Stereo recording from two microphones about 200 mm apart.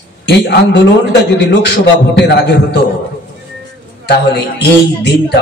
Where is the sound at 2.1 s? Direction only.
55° left (ahead or behind).